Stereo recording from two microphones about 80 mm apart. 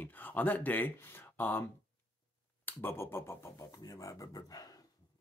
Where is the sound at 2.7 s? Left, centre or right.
Left.